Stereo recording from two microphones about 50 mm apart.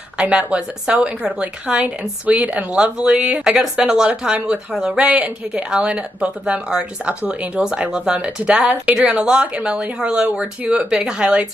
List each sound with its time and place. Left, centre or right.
0.2 s a woman's voice: right